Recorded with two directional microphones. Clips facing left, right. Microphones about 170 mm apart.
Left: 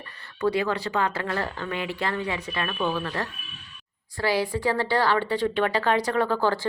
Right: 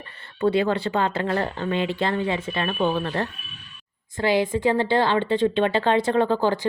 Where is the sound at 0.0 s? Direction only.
25° right (ahead or behind).